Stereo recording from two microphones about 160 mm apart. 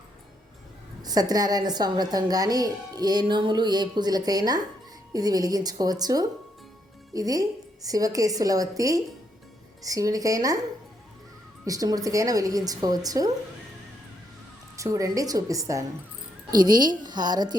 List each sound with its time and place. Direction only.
1.0 s speech: 25° right (ahead or behind)
11.6 s speech: 20° right (ahead or behind)
14.8 s speech: 20° right (ahead or behind)